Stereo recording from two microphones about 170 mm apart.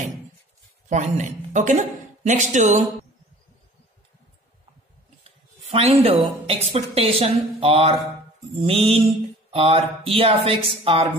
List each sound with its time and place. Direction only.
0.8 s speech: 45° right (ahead or behind)
5.7 s mantra: 35° right (ahead or behind)